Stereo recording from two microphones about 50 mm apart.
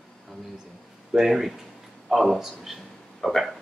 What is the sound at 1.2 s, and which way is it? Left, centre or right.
Speech, centre.